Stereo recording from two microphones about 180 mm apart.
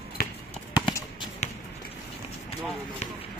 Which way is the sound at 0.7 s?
20° left (ahead or behind).